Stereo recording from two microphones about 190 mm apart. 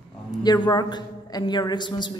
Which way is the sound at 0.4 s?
20° left (ahead or behind).